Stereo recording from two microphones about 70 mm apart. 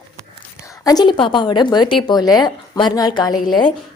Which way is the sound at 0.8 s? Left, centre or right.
Left.